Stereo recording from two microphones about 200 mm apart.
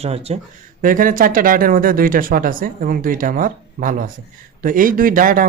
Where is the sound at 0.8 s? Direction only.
45° right (ahead or behind).